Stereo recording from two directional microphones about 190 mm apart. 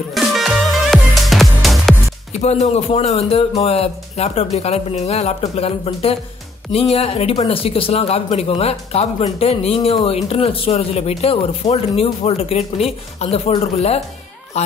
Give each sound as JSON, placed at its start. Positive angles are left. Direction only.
{"t": 0.1, "sound": "music", "side_deg": 0}
{"t": 2.4, "sound": "a man's voice", "side_deg": 35}